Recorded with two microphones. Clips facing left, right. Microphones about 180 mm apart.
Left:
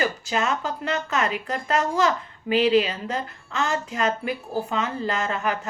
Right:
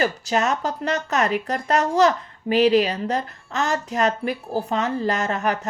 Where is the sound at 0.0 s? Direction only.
40° right (ahead or behind).